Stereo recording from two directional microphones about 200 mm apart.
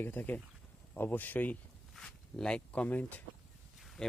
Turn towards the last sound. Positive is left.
turn(degrees=0)  # may be behind; listen again after turning